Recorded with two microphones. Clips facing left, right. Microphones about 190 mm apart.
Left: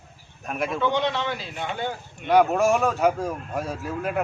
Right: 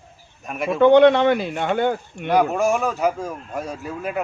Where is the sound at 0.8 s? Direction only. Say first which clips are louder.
Right 15 dB; 60° right (ahead or behind).